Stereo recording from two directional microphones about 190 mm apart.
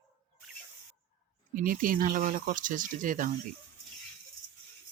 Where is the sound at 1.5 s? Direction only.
50° right (ahead or behind).